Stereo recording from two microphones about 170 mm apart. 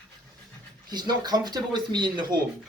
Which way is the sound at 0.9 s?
25° right (ahead or behind).